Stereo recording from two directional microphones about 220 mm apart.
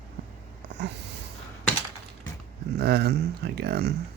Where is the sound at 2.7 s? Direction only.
50° right (ahead or behind).